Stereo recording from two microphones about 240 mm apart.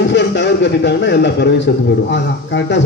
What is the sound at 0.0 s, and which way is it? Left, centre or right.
A man's voice, left.